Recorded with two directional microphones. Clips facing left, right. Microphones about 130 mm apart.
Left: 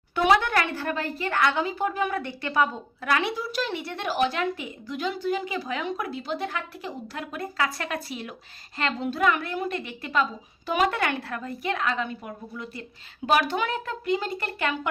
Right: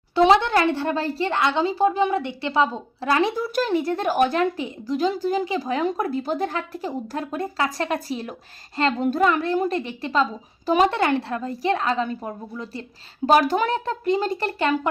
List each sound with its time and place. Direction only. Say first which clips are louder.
0.1 s speech: right 5 dB; 25° right (ahead or behind)
3.3 s speech: right 7 dB; 45° right (ahead or behind)
4.5 s a woman's voice: right 8 dB; 35° right (ahead or behind)
9.2 s a woman's voice: right 3 dB; 35° right (ahead or behind)